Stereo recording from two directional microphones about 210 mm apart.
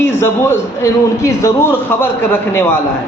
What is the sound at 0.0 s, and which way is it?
A man's voice, 10° left (ahead or behind).